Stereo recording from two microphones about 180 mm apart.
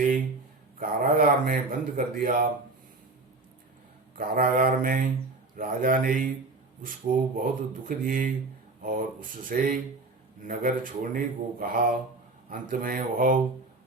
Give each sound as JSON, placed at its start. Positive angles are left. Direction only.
{"t": 0.8, "sound": "speech", "side_deg": -50}
{"t": 4.1, "sound": "speech", "side_deg": -50}